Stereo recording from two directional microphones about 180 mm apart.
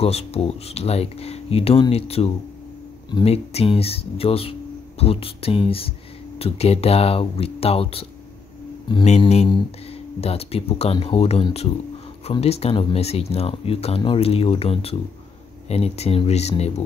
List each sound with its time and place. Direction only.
0.0 s speech: 35° left (ahead or behind)
9.2 s speech: 40° left (ahead or behind)